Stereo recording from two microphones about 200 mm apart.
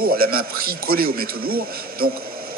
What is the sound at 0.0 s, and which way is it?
A man's voice, 50° right (ahead or behind).